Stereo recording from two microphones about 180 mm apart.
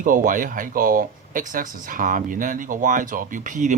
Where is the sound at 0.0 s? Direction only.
50° right (ahead or behind).